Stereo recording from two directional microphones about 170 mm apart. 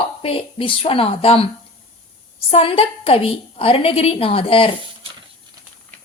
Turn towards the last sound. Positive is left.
turn(degrees=30)  # may be behind; listen again after turning